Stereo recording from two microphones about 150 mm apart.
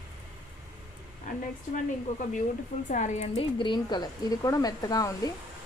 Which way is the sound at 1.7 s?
60° left (ahead or behind).